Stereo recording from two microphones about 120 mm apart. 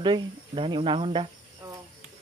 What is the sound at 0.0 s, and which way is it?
Speech, 40° right (ahead or behind).